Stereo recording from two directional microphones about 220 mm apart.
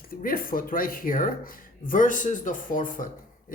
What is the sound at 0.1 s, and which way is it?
Speech, 40° left (ahead or behind).